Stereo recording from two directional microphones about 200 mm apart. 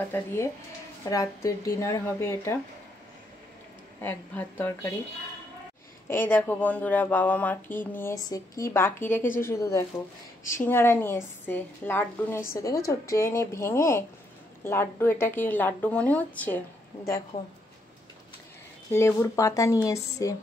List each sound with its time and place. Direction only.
0.1 s speech: 10° left (ahead or behind)
4.0 s speech: 10° left (ahead or behind)
6.0 s speech: 10° left (ahead or behind)
18.9 s speech: 15° left (ahead or behind)